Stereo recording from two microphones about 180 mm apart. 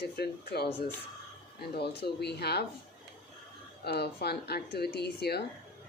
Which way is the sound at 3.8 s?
65° left (ahead or behind).